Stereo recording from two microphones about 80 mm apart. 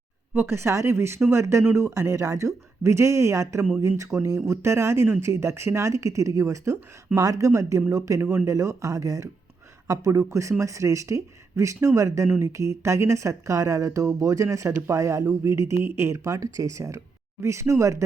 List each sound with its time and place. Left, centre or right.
0.3 s speech: right